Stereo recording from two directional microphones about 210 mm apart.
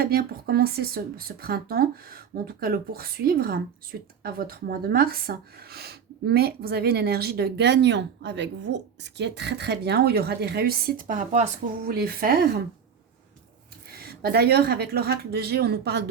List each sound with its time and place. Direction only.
0.0 s speech: 45° right (ahead or behind)
11.9 s speech: 45° right (ahead or behind)
14.0 s speech: 45° right (ahead or behind)